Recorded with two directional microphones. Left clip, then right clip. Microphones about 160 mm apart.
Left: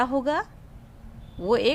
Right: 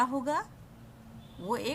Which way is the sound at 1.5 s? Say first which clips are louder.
Left 11 dB; 40° left (ahead or behind).